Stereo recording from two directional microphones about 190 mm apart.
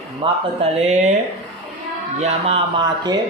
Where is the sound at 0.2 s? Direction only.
30° right (ahead or behind).